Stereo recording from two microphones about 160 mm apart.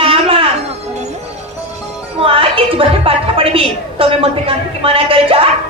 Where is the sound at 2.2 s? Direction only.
35° right (ahead or behind).